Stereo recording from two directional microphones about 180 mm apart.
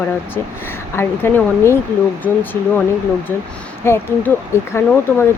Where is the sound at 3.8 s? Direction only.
15° left (ahead or behind).